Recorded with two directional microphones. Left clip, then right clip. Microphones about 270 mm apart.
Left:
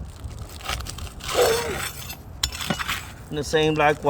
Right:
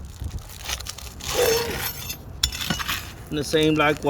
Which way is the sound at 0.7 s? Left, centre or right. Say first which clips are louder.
Left 1 dB; centre.